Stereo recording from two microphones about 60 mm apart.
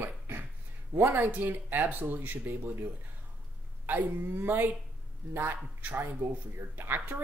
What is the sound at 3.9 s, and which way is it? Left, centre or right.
Speech, right.